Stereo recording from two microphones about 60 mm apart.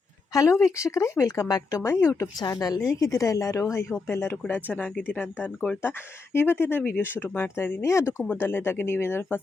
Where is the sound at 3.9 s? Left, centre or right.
Left.